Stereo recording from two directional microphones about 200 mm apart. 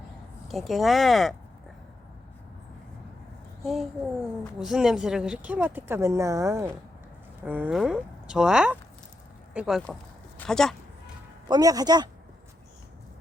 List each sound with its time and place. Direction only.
0.4 s speech: centre (ahead or behind)
3.6 s a child's voice: centre (ahead or behind)
11.4 s a man's voice: 20° right (ahead or behind)